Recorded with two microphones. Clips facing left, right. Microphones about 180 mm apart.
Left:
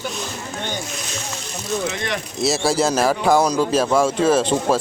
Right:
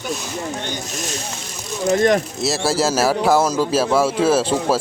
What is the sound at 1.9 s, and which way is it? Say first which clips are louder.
Speech: right 11 dB; 45° right (ahead or behind).